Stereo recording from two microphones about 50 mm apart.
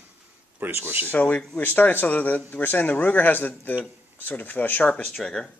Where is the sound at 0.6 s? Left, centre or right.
Right.